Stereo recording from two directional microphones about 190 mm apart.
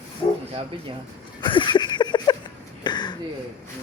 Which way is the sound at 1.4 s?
25° left (ahead or behind).